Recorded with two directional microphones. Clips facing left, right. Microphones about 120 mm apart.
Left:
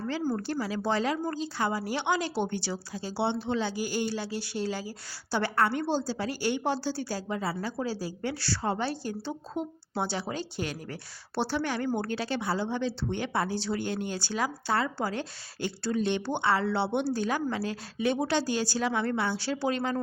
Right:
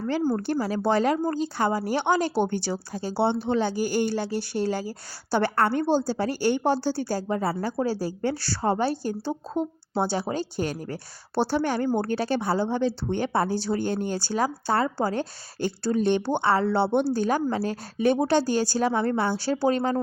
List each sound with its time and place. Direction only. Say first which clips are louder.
0.4 s a woman's voice: right 5 dB; 45° right (ahead or behind)